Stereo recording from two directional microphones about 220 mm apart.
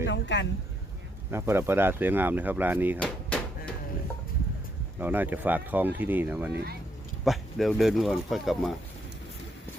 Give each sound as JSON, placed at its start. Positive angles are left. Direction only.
{"t": 0.0, "sound": "speech", "side_deg": 55}
{"t": 1.3, "sound": "speech", "side_deg": -10}
{"t": 3.0, "sound": "a sound", "side_deg": 5}
{"t": 4.9, "sound": "speech", "side_deg": -10}